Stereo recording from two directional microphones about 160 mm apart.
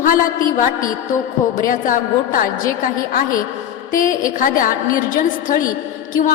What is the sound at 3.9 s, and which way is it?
Speech, 60° left (ahead or behind).